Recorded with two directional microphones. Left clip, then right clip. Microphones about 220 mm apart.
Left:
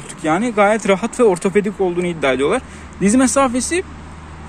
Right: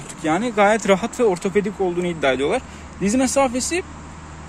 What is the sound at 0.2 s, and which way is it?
Speech, 10° right (ahead or behind).